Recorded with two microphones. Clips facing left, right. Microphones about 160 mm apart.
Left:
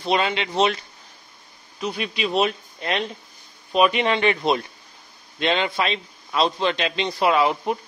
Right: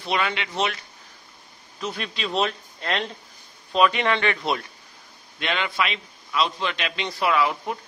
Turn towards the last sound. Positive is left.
turn(degrees=25)  # may be behind; listen again after turning